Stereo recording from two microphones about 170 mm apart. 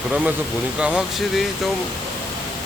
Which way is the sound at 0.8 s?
5° right (ahead or behind).